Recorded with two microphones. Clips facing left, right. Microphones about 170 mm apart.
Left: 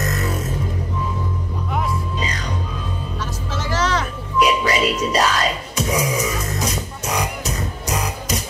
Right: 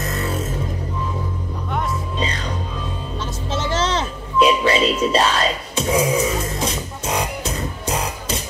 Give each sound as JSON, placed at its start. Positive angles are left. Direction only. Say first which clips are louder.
{"t": 0.1, "sound": "music", "louder": "even", "side_deg": -30}
{"t": 3.5, "sound": "music", "louder": "right 1 dB", "side_deg": -25}